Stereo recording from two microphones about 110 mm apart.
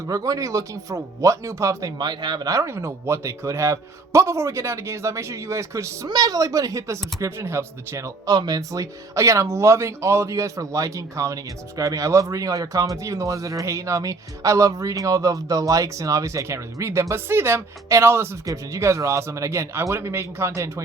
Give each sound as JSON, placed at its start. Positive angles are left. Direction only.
{"t": 0.1, "sound": "speech", "side_deg": -30}
{"t": 2.0, "sound": "speech", "side_deg": -40}